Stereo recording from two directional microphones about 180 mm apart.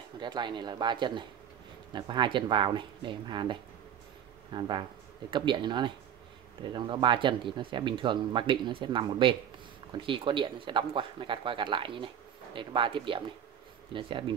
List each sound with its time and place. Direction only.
0.2 s speech: 25° right (ahead or behind)